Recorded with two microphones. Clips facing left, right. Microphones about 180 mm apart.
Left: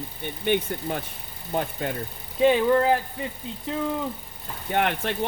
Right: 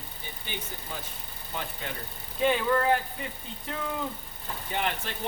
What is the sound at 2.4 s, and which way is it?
Speech, 25° left (ahead or behind).